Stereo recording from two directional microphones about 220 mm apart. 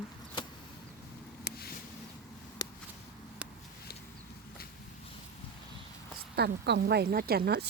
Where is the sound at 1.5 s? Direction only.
45° left (ahead or behind).